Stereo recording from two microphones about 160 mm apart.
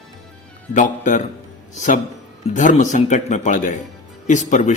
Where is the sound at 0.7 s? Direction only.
50° left (ahead or behind).